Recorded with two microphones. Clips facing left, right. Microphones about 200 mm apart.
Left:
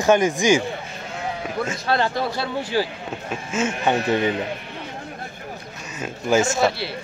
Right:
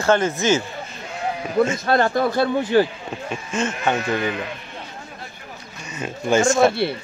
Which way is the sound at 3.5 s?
10° left (ahead or behind).